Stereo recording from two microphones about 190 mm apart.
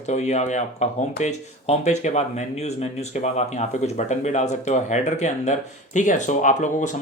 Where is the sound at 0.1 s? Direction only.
35° left (ahead or behind).